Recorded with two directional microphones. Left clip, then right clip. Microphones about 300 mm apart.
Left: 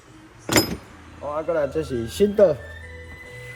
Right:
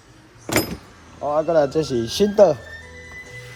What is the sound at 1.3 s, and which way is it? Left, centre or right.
Speech, centre.